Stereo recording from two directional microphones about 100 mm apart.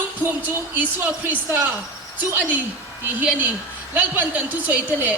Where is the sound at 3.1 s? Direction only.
20° right (ahead or behind).